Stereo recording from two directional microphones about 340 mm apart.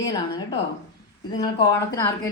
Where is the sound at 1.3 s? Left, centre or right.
Centre.